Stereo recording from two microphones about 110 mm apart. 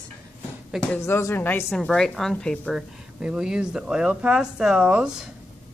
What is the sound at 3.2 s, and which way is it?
Speech, 5° right (ahead or behind).